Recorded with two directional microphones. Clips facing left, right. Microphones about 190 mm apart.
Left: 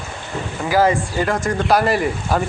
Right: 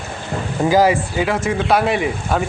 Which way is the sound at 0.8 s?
5° right (ahead or behind).